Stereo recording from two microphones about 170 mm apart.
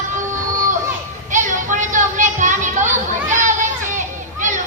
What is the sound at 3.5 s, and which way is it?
Children playing, 45° right (ahead or behind).